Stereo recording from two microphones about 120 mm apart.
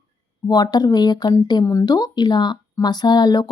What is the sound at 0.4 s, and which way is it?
Speech, 35° left (ahead or behind).